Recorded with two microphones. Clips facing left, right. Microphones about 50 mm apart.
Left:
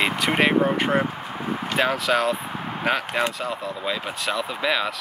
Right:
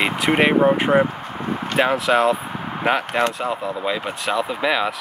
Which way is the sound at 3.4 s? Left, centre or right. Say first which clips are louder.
Right 4 dB; centre.